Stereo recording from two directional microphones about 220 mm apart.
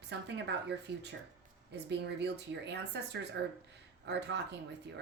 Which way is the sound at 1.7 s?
50° right (ahead or behind).